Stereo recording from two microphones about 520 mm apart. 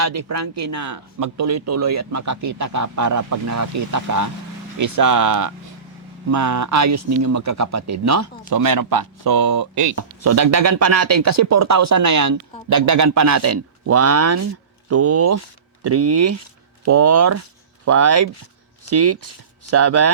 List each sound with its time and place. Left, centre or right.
0.0 s speech: right